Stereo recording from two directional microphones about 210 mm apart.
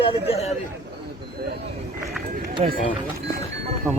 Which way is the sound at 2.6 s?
30° right (ahead or behind).